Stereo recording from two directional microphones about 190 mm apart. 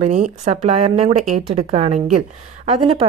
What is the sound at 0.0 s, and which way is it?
Speech, 40° right (ahead or behind).